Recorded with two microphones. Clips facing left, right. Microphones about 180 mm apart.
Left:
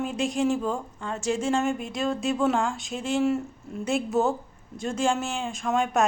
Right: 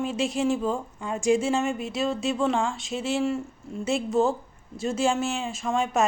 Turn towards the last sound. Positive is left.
turn(degrees=0)  # may be behind; listen again after turning